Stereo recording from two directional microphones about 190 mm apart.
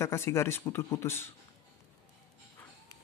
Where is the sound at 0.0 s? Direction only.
15° left (ahead or behind).